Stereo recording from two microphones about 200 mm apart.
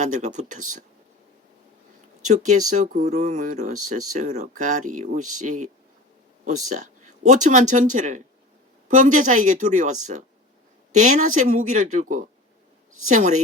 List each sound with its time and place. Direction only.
0.0 s speech: 35° right (ahead or behind)
2.2 s speech: 40° right (ahead or behind)